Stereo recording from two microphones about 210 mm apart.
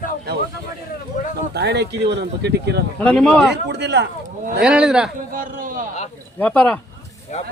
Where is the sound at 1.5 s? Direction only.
55° right (ahead or behind).